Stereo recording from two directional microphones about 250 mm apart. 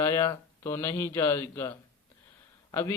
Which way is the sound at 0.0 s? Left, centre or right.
Centre.